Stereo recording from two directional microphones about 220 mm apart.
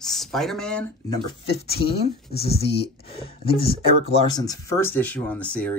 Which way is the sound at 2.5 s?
25° left (ahead or behind).